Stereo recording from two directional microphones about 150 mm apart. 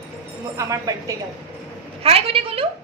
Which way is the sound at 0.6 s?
20° right (ahead or behind).